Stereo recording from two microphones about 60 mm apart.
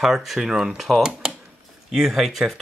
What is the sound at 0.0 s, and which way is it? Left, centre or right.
Speech, centre.